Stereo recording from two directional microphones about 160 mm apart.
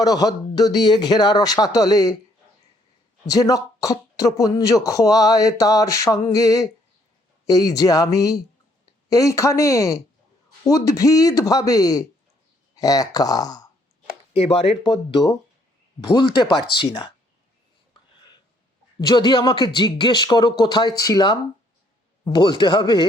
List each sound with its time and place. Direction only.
0.0 s speech: 25° left (ahead or behind)
3.2 s speech: 20° left (ahead or behind)
14.3 s speech: 35° left (ahead or behind)
16.1 s speech: 25° left (ahead or behind)
18.9 s speech: 25° left (ahead or behind)